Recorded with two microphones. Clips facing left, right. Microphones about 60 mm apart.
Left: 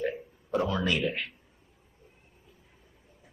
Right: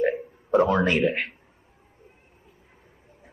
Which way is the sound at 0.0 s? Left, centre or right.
Right.